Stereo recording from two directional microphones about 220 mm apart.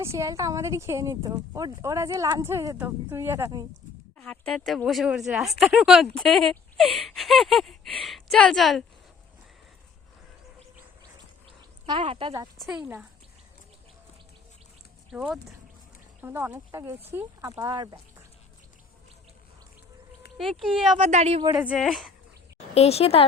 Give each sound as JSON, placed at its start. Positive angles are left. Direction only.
{"t": 0.0, "sound": "speech", "side_deg": -15}
{"t": 4.2, "sound": "a woman's voice", "side_deg": 0}
{"t": 11.9, "sound": "speech", "side_deg": -25}
{"t": 12.7, "sound": "speech", "side_deg": -10}
{"t": 15.1, "sound": "a woman's voice", "side_deg": -5}
{"t": 20.4, "sound": "a woman's voice", "side_deg": 0}
{"t": 21.0, "sound": "speech", "side_deg": -30}
{"t": 21.4, "sound": "a woman's voice", "side_deg": -5}
{"t": 22.5, "sound": "speech", "side_deg": 30}